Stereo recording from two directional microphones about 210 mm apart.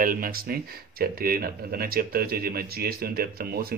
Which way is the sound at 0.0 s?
40° right (ahead or behind).